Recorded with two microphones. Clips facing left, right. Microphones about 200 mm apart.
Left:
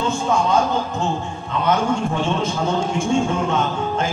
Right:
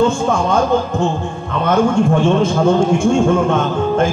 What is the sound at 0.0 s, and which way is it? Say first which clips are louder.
A man's voice: right 5 dB; 50° right (ahead or behind).